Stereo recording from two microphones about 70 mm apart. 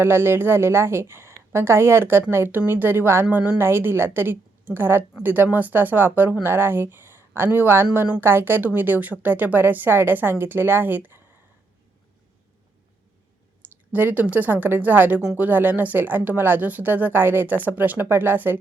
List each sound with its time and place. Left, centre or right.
0.0 s a woman's voice: right
13.9 s speech: right